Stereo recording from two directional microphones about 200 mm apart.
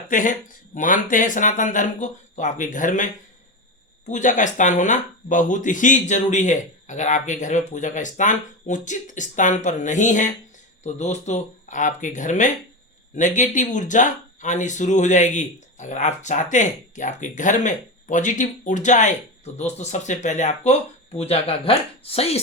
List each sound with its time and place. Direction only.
0.1 s speech: 40° left (ahead or behind)